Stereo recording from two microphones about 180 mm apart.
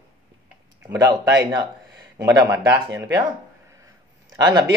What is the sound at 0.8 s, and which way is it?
Speech, 20° right (ahead or behind).